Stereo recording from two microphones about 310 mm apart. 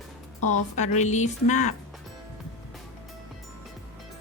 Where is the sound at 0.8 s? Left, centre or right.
Left.